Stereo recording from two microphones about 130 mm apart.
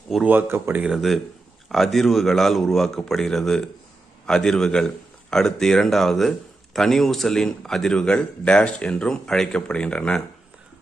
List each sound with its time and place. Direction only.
0.3 s speech: 15° right (ahead or behind)
0.8 s a man's voice: centre (ahead or behind)